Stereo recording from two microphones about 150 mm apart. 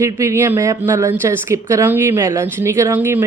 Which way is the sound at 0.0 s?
20° right (ahead or behind).